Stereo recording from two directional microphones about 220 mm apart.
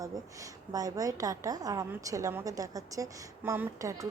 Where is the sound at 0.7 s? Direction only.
15° right (ahead or behind).